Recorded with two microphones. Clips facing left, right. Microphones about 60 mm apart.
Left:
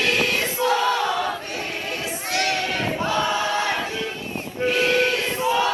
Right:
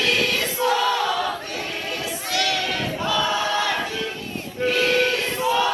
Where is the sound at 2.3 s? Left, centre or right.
Left.